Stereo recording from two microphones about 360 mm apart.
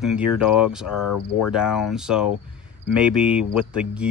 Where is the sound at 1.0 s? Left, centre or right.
Left.